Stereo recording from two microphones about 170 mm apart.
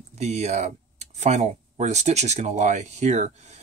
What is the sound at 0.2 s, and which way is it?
Speech, 40° right (ahead or behind).